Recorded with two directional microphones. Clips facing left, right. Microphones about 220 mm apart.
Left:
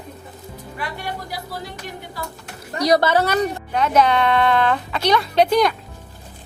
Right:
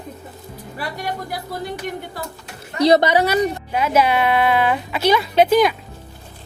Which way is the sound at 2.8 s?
25° right (ahead or behind).